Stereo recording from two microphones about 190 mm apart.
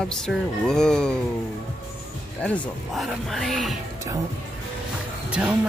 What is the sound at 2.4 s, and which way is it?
Speech, 5° left (ahead or behind).